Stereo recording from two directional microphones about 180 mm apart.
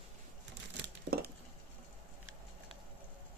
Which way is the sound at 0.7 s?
65° right (ahead or behind).